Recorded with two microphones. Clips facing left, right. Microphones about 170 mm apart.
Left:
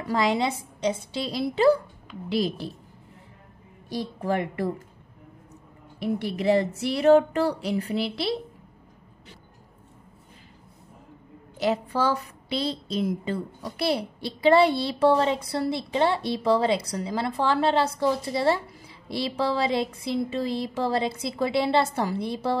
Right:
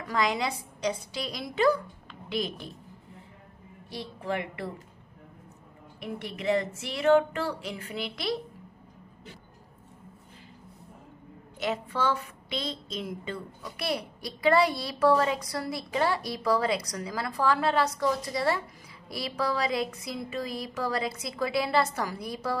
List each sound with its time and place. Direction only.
0.0 s a woman's voice: 30° left (ahead or behind)
4.2 s a woman's voice: 40° left (ahead or behind)
5.9 s speech: 35° left (ahead or behind)
11.5 s a woman's voice: 35° left (ahead or behind)